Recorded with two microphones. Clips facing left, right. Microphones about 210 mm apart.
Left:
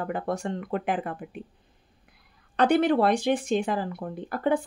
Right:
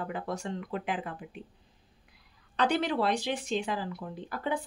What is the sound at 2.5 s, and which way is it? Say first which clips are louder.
A woman's voice: left 7 dB; 55° left (ahead or behind).